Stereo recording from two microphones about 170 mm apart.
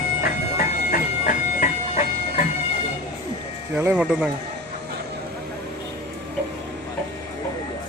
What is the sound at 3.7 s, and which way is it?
Speech, 10° right (ahead or behind).